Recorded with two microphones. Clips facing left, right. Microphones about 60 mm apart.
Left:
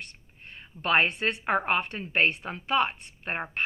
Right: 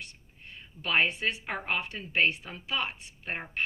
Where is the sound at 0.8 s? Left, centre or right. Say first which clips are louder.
Left 3 dB; left.